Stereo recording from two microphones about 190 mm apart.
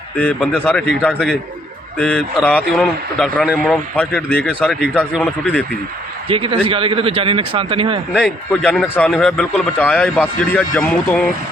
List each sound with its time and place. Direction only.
0.2 s a man's voice: 5° left (ahead or behind)
6.2 s speech: 30° right (ahead or behind)
8.6 s a man's voice: 5° left (ahead or behind)